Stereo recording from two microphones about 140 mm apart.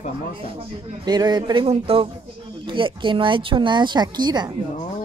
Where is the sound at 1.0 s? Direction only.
30° right (ahead or behind).